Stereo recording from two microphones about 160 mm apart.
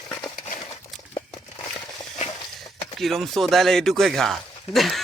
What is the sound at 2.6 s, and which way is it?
Speech, centre (ahead or behind).